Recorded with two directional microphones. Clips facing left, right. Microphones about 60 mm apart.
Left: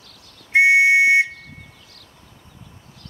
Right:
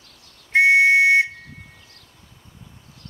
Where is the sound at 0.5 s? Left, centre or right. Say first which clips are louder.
Left 1 dB; centre.